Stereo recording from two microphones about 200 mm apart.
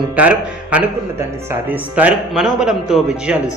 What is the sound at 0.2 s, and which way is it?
Speech, 5° right (ahead or behind).